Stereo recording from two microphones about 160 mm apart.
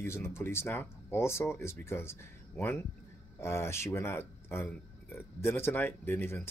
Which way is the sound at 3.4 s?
15° left (ahead or behind).